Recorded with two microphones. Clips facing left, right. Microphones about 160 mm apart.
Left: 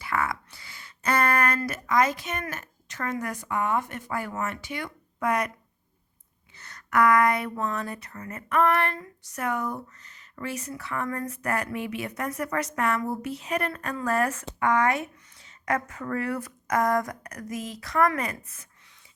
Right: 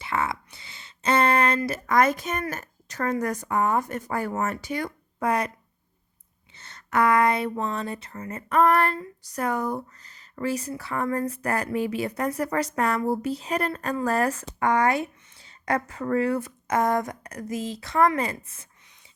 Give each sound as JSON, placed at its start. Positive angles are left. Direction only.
{"t": 0.0, "sound": "a sound", "side_deg": -25}
{"t": 1.9, "sound": "a woman's voice", "side_deg": -55}
{"t": 6.6, "sound": "a woman's voice", "side_deg": -25}